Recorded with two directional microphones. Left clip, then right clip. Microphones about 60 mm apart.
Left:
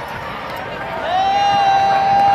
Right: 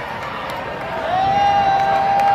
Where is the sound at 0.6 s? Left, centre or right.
Left.